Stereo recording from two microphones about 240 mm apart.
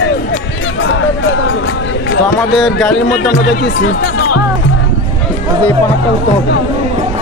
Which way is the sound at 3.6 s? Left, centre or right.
Left.